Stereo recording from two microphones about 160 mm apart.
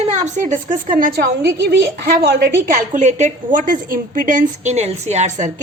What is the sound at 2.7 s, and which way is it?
A woman's voice, 50° right (ahead or behind).